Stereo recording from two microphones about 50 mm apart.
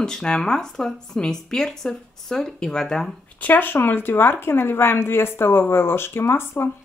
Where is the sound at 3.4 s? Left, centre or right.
Left.